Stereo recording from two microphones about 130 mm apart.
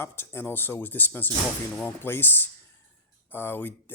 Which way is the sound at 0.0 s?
20° left (ahead or behind).